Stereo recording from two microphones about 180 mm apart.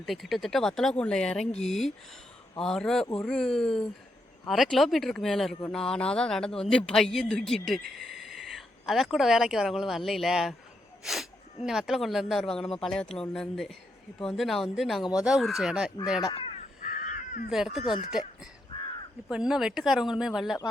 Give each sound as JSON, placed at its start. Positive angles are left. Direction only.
{"t": 0.0, "sound": "speech", "side_deg": 0}
{"t": 7.9, "sound": "a sound", "side_deg": 0}
{"t": 9.1, "sound": "speech", "side_deg": 0}
{"t": 16.2, "sound": "crow", "side_deg": 30}
{"t": 16.9, "sound": "crow", "side_deg": 50}
{"t": 17.5, "sound": "speech", "side_deg": 0}
{"t": 18.7, "sound": "crow", "side_deg": 30}
{"t": 19.3, "sound": "speech", "side_deg": -5}